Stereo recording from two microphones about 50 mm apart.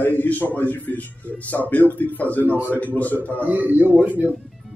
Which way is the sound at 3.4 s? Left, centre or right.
Right.